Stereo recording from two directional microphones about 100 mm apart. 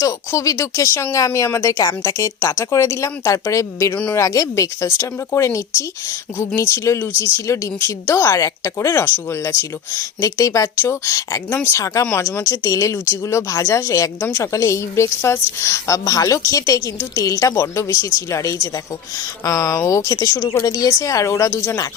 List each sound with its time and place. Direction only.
0.0 s a woman's voice: 30° left (ahead or behind)